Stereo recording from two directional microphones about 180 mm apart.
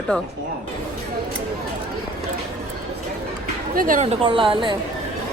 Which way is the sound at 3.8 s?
45° right (ahead or behind).